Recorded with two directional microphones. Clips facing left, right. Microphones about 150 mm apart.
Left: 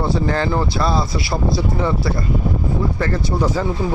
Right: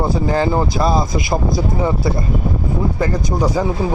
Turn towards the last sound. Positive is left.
turn(degrees=-15)  # may be behind; listen again after turning